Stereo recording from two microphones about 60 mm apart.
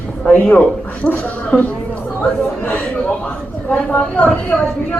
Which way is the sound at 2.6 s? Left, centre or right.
Left.